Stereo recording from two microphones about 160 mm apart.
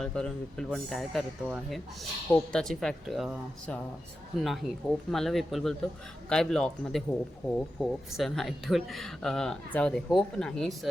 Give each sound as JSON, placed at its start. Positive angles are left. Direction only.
{"t": 0.0, "sound": "speech", "side_deg": 5}